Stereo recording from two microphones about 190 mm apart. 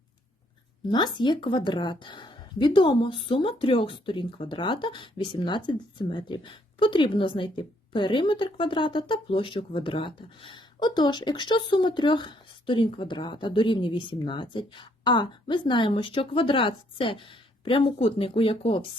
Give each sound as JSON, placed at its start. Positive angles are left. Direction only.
{"t": 0.9, "sound": "a woman's voice", "side_deg": 25}